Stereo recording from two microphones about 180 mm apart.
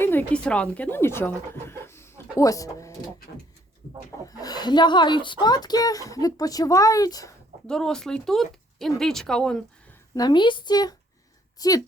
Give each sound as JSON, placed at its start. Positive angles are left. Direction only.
{"t": 0.0, "sound": "speech", "side_deg": 10}
{"t": 4.3, "sound": "speech", "side_deg": 20}
{"t": 7.7, "sound": "speech", "side_deg": 5}
{"t": 10.2, "sound": "speech", "side_deg": 25}